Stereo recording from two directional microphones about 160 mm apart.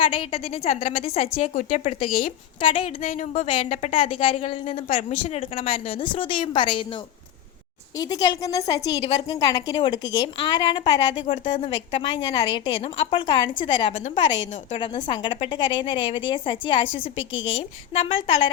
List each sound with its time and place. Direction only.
0.0 s a woman's voice: 35° left (ahead or behind)